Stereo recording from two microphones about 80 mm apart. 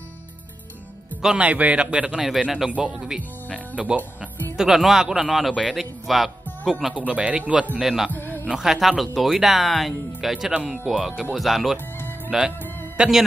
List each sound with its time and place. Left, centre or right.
1.2 s a man's voice: centre
4.6 s speech: centre
7.0 s a man's voice: centre
8.1 s music: left
8.5 s a man's voice: centre